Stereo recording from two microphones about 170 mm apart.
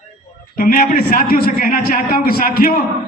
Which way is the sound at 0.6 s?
55° left (ahead or behind).